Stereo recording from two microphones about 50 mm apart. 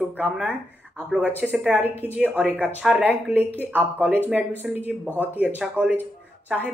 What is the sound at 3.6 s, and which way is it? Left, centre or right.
Speech, right.